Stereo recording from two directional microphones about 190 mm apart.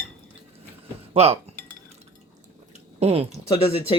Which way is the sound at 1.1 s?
35° right (ahead or behind).